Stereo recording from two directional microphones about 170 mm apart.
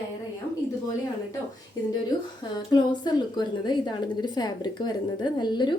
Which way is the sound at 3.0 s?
25° left (ahead or behind).